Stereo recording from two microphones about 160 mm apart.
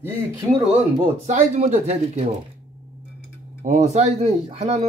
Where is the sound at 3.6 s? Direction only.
50° right (ahead or behind).